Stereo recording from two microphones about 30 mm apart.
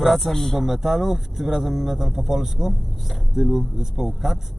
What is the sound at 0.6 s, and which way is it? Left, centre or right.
Speech, centre.